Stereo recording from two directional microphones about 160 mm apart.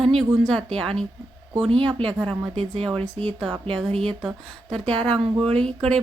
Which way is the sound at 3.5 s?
35° right (ahead or behind).